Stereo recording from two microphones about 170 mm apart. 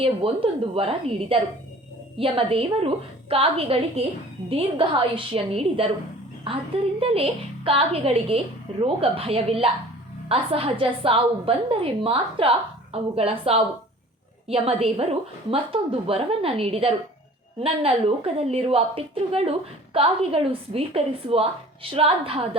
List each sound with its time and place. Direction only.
0.0 s a woman's voice: 35° right (ahead or behind)